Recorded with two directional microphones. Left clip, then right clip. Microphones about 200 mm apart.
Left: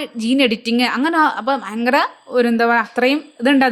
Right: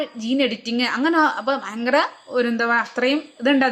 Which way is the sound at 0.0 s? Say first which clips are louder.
Left 4 dB; 35° left (ahead or behind).